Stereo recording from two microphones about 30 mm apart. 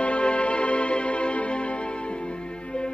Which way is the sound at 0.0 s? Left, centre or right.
Left.